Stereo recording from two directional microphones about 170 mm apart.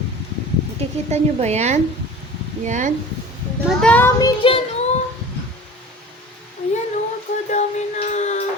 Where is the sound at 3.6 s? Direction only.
5° left (ahead or behind).